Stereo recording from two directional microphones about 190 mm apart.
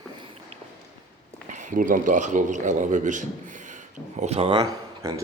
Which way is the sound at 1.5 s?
40° right (ahead or behind).